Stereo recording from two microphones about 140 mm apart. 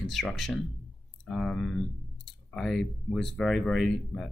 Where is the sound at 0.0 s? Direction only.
Centre (ahead or behind).